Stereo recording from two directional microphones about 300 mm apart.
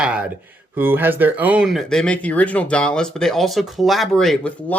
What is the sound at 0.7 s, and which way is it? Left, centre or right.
Speech, centre.